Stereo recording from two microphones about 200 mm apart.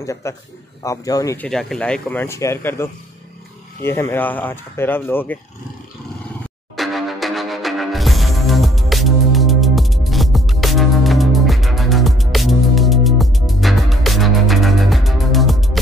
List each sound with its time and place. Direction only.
0.0 s speech: 15° left (ahead or behind)
1.5 s speech: centre (ahead or behind)
6.8 s music: centre (ahead or behind)